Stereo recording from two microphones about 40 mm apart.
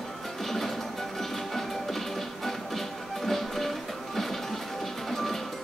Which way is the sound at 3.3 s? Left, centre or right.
Centre.